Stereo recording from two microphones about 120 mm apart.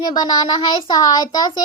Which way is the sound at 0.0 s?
35° left (ahead or behind).